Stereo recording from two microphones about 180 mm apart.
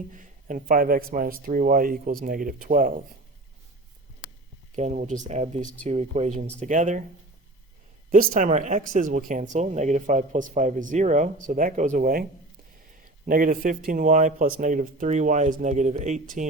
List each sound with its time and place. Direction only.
0.1 s speech: 45° right (ahead or behind)
4.7 s speech: 40° right (ahead or behind)
8.1 s speech: 45° right (ahead or behind)
13.2 s speech: 50° right (ahead or behind)